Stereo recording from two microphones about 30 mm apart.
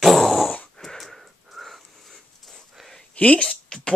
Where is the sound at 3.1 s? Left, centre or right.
Left.